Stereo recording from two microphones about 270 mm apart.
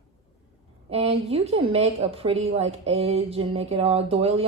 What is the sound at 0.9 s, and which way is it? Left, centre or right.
A woman's voice, right.